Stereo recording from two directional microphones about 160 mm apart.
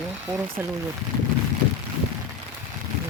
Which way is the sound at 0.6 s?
10° right (ahead or behind).